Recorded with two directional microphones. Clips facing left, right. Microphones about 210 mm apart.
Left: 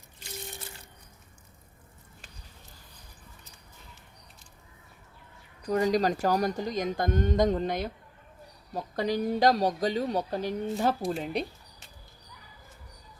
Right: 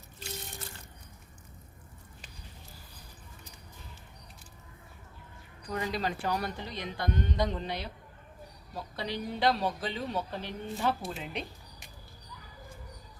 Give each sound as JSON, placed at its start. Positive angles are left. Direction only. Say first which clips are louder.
{"t": 5.6, "sound": "speech", "louder": "left 8 dB", "side_deg": 45}